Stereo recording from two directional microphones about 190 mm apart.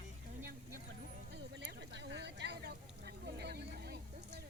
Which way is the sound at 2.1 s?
65° right (ahead or behind).